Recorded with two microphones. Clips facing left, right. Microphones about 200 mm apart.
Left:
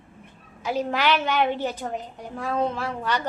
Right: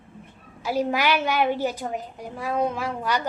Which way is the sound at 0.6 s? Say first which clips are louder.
Right 1 dB; 10° right (ahead or behind).